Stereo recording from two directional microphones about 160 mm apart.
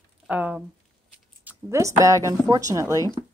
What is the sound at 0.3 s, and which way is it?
Speech, 10° right (ahead or behind).